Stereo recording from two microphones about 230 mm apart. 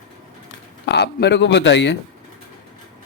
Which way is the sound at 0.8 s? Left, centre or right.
Left.